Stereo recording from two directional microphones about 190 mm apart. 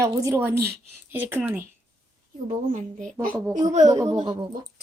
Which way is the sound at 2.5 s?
40° right (ahead or behind).